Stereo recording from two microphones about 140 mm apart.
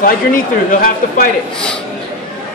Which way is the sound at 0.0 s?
85° left.